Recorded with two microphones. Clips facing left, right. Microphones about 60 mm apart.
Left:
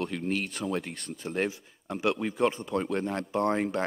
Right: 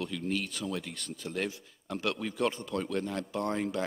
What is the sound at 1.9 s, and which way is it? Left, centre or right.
Speech, left.